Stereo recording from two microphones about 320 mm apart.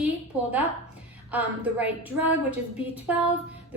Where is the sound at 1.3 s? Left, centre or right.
Centre.